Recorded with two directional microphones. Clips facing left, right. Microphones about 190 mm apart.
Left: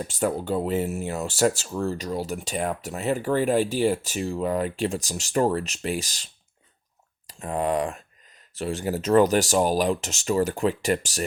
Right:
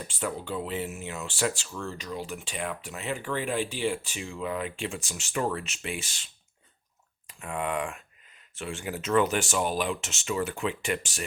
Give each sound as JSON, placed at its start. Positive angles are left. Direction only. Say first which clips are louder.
{"t": 0.0, "sound": "speech", "louder": "left 7 dB", "side_deg": 40}